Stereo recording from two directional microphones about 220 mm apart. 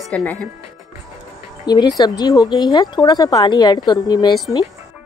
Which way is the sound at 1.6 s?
20° left (ahead or behind).